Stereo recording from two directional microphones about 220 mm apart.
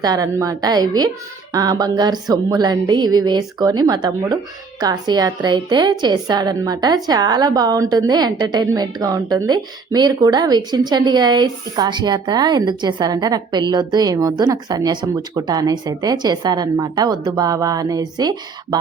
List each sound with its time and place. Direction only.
0.0 s a woman's voice: 15° right (ahead or behind)